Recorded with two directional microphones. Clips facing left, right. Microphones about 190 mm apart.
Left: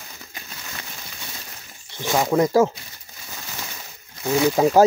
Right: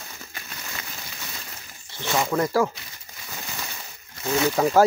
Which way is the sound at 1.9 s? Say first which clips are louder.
Left 4 dB; 15° left (ahead or behind).